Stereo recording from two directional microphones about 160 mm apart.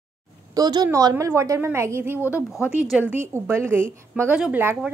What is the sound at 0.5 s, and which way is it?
A woman's voice, 25° right (ahead or behind).